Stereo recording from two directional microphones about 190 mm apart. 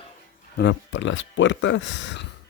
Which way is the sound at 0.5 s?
65° left (ahead or behind).